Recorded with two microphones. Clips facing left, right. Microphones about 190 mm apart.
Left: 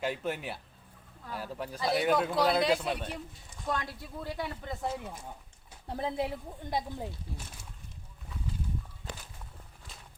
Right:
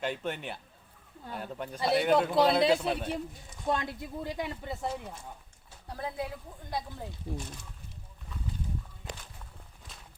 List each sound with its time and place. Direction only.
0.0 s speech: 5° left (ahead or behind)
3.7 s speech: 20° right (ahead or behind)
5.9 s speech: 25° left (ahead or behind)